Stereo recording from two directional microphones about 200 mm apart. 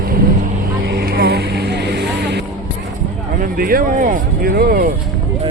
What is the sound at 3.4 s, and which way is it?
Speech, 45° right (ahead or behind).